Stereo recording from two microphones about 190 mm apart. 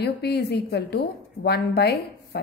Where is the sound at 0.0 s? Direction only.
60° left (ahead or behind).